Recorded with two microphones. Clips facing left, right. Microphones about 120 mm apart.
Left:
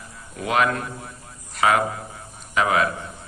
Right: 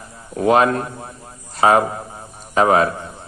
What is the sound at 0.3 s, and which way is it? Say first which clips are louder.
A man's voice: right 7 dB; 35° right (ahead or behind).